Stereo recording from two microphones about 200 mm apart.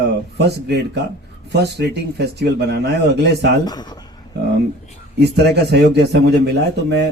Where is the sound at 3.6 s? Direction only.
20° left (ahead or behind).